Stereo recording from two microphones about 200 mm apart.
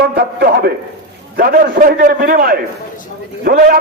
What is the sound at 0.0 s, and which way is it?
A man's voice, 50° right (ahead or behind).